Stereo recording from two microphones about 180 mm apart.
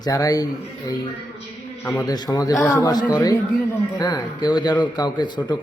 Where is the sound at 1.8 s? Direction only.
15° left (ahead or behind).